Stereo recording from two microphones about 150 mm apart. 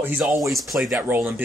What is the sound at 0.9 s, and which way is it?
Speech, 10° right (ahead or behind).